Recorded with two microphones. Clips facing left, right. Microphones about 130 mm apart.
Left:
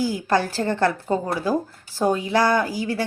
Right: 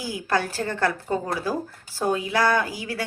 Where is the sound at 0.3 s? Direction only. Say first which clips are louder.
Left 1 dB; 30° left (ahead or behind).